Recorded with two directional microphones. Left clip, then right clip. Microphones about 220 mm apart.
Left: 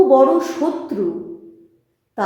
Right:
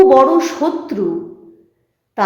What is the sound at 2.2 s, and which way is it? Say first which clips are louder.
Speech: right 5 dB; 20° right (ahead or behind).